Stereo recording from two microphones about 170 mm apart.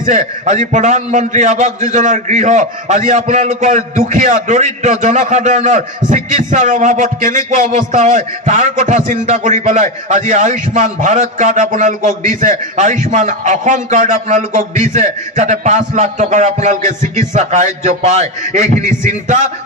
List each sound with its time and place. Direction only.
0.0 s a man's voice: 45° right (ahead or behind)